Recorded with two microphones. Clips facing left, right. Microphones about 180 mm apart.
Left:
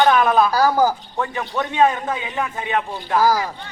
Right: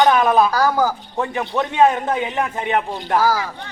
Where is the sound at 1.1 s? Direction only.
25° right (ahead or behind).